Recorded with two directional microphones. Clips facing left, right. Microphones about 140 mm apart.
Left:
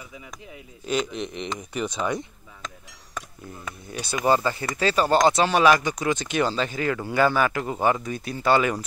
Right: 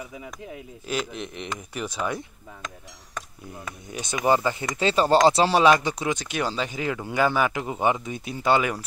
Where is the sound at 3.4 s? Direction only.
15° right (ahead or behind).